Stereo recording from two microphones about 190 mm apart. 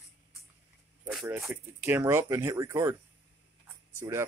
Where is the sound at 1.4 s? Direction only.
10° right (ahead or behind).